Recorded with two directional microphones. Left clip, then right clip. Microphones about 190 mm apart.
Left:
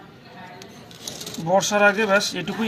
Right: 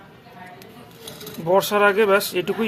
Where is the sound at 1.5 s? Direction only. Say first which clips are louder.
Right 1 dB; 50° right (ahead or behind).